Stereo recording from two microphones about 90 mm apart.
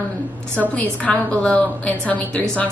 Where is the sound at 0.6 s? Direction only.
15° left (ahead or behind).